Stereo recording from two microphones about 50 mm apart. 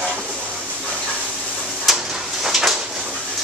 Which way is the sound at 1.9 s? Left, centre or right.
Centre.